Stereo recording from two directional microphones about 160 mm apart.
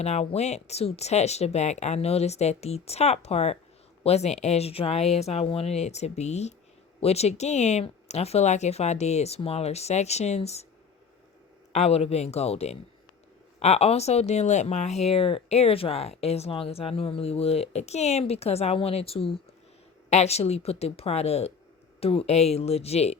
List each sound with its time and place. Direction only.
0.0 s speech: 45° left (ahead or behind)
11.7 s speech: 40° left (ahead or behind)